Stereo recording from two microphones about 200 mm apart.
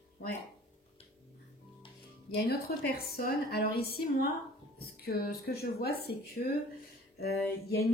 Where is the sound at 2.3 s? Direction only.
50° left (ahead or behind).